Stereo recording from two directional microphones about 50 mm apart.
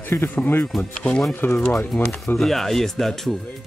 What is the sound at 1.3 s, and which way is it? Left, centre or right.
Speech, left.